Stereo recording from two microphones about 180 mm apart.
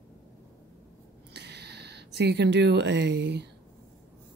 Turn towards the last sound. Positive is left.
turn(degrees=-70)  # may be behind; listen again after turning